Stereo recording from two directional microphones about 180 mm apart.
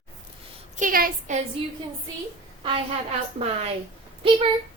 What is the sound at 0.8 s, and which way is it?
Speech, 50° right (ahead or behind).